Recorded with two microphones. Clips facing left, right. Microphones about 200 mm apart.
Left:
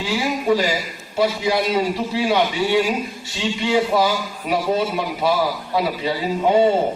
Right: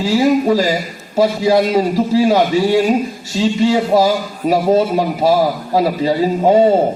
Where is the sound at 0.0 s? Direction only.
40° right (ahead or behind).